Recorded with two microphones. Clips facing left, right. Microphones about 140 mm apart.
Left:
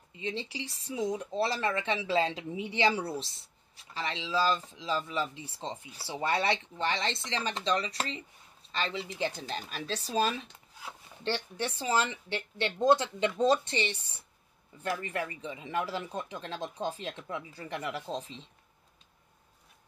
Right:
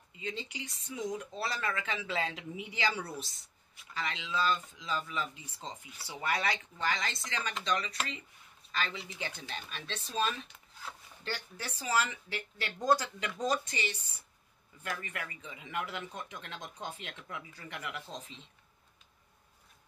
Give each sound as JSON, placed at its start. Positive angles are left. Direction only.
{"t": 0.2, "sound": "speech", "side_deg": 30}